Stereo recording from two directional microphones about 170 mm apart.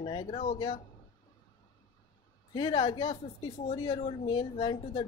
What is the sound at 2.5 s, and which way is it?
Speech, 30° left (ahead or behind).